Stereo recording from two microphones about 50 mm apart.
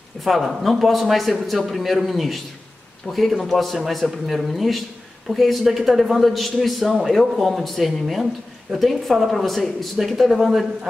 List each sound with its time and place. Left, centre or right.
0.2 s a man's voice: centre